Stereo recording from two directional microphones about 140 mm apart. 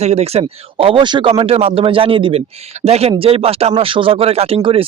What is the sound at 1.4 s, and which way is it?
Speech, 45° right (ahead or behind).